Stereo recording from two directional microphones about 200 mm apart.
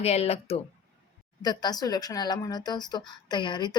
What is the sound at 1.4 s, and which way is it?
Speech, 20° left (ahead or behind).